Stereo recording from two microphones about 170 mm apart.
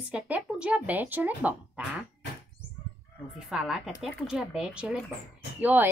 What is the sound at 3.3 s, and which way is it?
A woman's voice, centre (ahead or behind).